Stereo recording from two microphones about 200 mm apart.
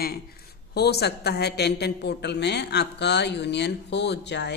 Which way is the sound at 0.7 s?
55° left (ahead or behind).